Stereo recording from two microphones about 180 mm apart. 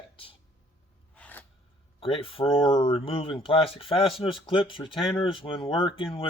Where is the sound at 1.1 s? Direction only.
10° left (ahead or behind).